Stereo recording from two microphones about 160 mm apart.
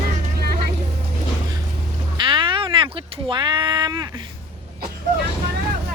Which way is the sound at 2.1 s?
30° right (ahead or behind).